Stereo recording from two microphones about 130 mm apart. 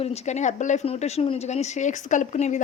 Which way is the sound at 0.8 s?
50° left (ahead or behind).